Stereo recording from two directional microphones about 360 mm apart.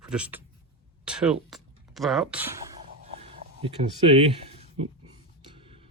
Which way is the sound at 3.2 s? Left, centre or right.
Centre.